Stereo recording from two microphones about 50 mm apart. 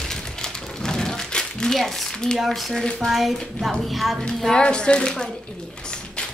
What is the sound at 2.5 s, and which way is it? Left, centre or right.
A woman's voice, centre.